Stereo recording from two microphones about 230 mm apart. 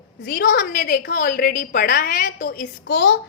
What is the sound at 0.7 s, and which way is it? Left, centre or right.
A woman's voice, left.